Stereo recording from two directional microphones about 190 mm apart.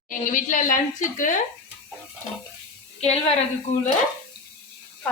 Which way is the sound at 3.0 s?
35° left (ahead or behind).